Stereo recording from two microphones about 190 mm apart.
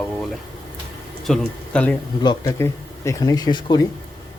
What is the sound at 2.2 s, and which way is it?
Speech, 15° left (ahead or behind).